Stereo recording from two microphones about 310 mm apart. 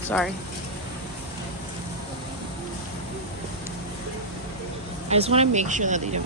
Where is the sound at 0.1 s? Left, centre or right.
Centre.